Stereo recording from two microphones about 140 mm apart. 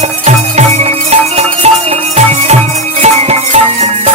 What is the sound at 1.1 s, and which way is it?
Music, 45° right (ahead or behind).